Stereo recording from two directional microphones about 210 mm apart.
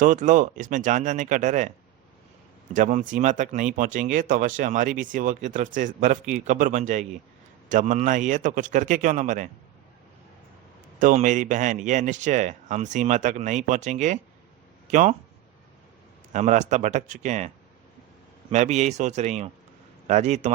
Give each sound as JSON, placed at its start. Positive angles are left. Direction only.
{"t": 0.0, "sound": "speech", "side_deg": -35}
{"t": 2.7, "sound": "speech", "side_deg": -35}
{"t": 11.0, "sound": "speech", "side_deg": -35}
{"t": 16.3, "sound": "speech", "side_deg": -35}
{"t": 18.5, "sound": "speech", "side_deg": -35}